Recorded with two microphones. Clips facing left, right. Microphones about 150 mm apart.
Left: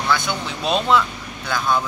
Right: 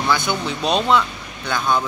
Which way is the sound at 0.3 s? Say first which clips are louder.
Right 2 dB; centre (ahead or behind).